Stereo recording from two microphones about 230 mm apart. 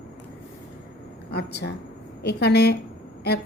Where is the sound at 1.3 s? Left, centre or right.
Left.